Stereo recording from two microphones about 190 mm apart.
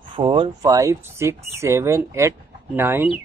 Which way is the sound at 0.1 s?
25° right (ahead or behind).